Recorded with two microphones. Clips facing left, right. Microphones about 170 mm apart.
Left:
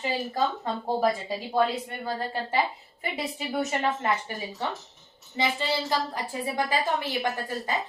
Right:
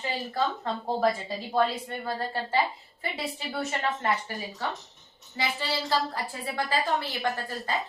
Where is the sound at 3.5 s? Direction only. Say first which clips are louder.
Left 4 dB; 20° left (ahead or behind).